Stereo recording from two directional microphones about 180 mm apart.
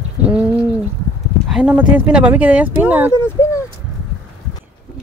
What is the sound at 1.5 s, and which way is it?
Speech, 5° right (ahead or behind).